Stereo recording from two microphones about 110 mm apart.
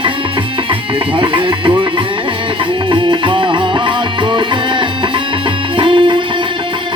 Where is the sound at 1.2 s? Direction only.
50° right (ahead or behind).